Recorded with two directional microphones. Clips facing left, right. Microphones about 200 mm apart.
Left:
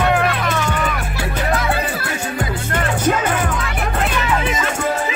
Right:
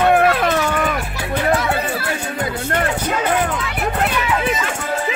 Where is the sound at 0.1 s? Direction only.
50° right (ahead or behind).